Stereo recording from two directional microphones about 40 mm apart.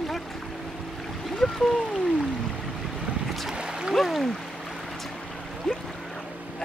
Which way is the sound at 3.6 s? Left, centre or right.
Centre.